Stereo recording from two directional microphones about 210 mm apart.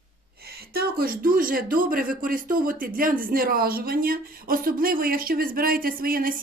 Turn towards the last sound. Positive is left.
turn(degrees=-45)  # may be behind; listen again after turning